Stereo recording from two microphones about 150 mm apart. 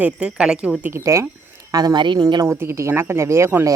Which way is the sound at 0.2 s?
5° right (ahead or behind).